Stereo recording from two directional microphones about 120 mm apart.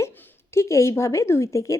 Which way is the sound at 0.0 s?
20° left (ahead or behind).